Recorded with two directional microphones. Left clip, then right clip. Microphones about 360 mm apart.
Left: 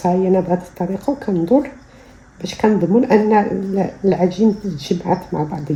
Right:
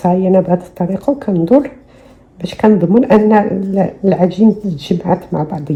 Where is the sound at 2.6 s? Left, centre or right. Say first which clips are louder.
Right 4 dB; right.